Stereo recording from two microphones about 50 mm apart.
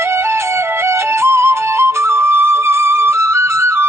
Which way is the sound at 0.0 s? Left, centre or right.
Right.